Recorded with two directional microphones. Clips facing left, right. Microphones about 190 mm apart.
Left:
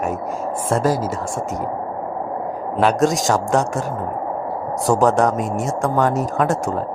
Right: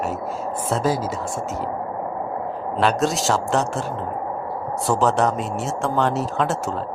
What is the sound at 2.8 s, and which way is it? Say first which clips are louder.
Speech: left 4 dB; centre (ahead or behind).